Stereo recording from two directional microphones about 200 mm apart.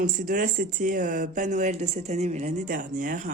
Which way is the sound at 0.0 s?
45° right (ahead or behind).